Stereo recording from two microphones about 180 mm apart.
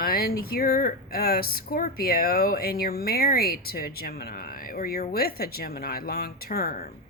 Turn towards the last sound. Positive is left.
turn(degrees=55)  # may be behind; listen again after turning